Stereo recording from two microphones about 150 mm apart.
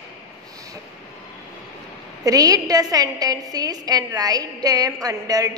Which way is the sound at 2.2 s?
25° right (ahead or behind).